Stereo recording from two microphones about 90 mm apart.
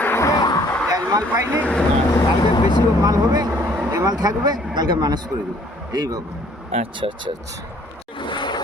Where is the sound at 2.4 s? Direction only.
70° left (ahead or behind).